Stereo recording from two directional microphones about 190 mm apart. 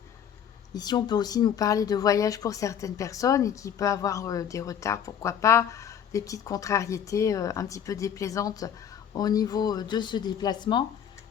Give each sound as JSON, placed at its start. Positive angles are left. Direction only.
{"t": 0.7, "sound": "speech", "side_deg": 20}